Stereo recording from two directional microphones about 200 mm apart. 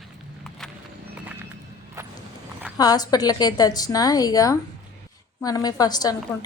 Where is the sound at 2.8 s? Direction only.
20° left (ahead or behind).